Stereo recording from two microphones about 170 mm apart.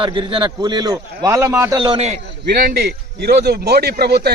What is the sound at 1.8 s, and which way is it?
Speech, 30° right (ahead or behind).